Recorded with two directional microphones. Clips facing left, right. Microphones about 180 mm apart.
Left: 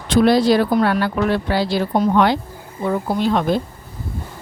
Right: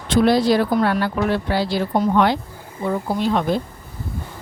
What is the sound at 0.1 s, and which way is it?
Speech, 80° left.